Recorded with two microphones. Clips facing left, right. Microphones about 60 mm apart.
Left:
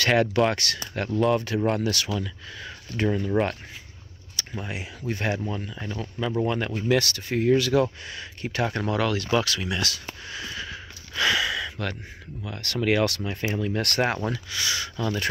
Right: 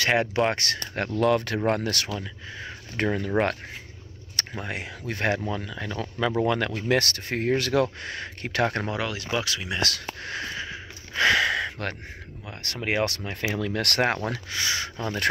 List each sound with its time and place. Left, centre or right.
0.0 s speech: right
0.9 s speech: right
1.7 s speech: right
2.1 s speech: right
3.0 s speech: right
5.5 s speech: right
8.8 s speech: centre
10.2 s a sound: right
10.5 s a sound: right
11.1 s a sound: right
12.4 s speech: right
13.3 s speech: right
14.5 s speech: right